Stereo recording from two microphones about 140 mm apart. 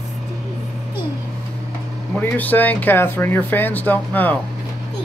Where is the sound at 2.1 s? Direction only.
10° left (ahead or behind).